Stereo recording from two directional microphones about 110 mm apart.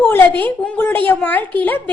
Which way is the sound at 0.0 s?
15° left (ahead or behind).